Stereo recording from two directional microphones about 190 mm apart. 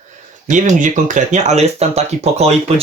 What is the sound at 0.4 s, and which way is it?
Speech, 40° right (ahead or behind).